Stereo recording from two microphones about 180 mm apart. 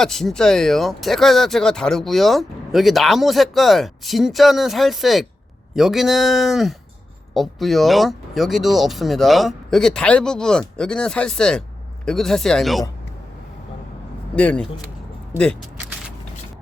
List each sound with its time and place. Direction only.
0.0 s speech: centre (ahead or behind)
14.3 s speech: 5° left (ahead or behind)